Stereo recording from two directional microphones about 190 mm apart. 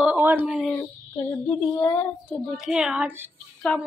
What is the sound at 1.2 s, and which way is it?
Child singing, 15° left (ahead or behind).